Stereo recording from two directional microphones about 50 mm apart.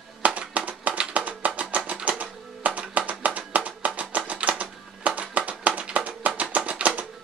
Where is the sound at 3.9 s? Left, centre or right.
Right.